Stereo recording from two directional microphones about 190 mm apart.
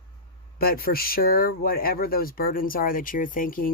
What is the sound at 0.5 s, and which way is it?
Speech, 50° left (ahead or behind).